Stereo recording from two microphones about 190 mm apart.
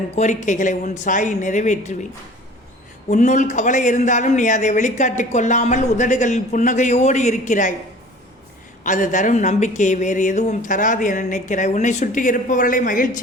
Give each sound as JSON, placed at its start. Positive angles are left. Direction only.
{"t": 0.4, "sound": "a man's voice", "side_deg": 40}
{"t": 3.1, "sound": "a man's voice", "side_deg": 40}
{"t": 8.8, "sound": "a man's voice", "side_deg": 40}